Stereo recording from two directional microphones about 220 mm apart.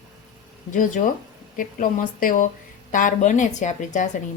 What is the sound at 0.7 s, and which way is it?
A woman's voice, 35° left (ahead or behind).